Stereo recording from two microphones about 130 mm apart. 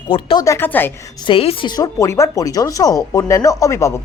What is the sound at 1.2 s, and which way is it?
Speech, 45° left (ahead or behind).